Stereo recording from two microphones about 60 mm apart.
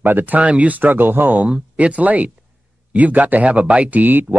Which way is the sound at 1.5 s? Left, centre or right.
Right.